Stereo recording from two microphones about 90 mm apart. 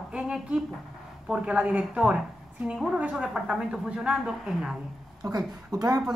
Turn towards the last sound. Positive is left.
turn(degrees=-45)  # may be behind; listen again after turning